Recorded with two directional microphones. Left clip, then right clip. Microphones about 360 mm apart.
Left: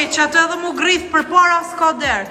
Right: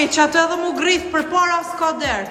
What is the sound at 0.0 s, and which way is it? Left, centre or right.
Speech, centre.